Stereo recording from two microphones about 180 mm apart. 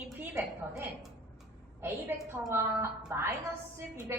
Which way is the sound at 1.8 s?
15° right (ahead or behind).